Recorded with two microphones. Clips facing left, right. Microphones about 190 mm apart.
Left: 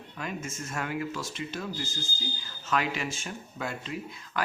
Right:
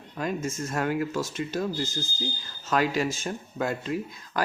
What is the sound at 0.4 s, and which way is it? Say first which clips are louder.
Speech: right 7 dB; 35° right (ahead or behind).